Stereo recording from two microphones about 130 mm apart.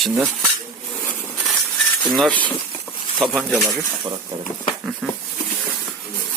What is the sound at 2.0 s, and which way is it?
Speech, centre (ahead or behind).